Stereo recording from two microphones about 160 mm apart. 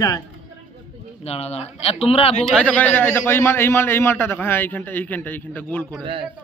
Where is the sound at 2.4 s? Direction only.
5° left (ahead or behind).